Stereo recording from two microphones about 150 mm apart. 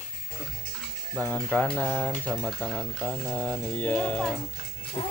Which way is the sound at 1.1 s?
10° left (ahead or behind).